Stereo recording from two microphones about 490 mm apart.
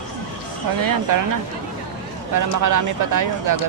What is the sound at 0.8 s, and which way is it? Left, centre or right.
Speech, right.